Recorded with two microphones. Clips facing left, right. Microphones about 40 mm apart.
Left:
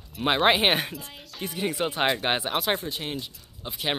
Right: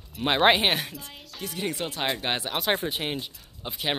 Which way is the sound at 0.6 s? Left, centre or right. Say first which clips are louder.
Left 2 dB; centre.